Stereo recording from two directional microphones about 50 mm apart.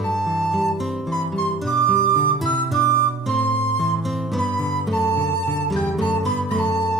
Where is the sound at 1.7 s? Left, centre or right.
Left.